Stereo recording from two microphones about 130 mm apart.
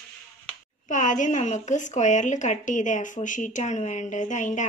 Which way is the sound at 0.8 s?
75° left (ahead or behind).